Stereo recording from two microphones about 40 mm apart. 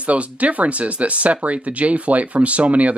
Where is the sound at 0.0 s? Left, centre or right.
Right.